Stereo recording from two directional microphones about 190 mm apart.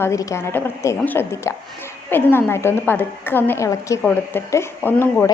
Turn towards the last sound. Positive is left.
turn(degrees=10)  # may be behind; listen again after turning